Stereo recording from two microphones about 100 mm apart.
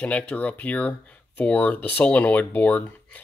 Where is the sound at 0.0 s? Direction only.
15° left (ahead or behind).